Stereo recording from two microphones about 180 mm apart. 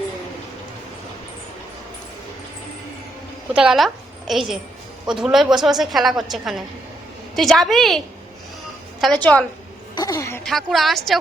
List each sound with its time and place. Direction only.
3.5 s a woman's voice: 5° right (ahead or behind)
9.9 s a woman's voice: 20° left (ahead or behind)
10.4 s a man's voice: centre (ahead or behind)